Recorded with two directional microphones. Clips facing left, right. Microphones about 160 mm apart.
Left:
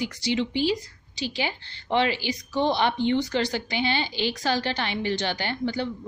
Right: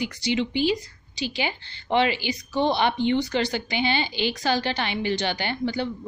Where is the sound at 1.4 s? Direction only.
5° right (ahead or behind).